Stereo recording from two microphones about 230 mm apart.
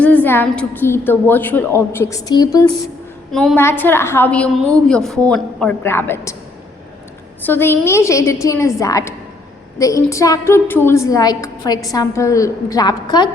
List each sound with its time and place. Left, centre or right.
0.0 s a woman's voice: centre
3.3 s a woman's voice: centre
7.4 s a woman's voice: centre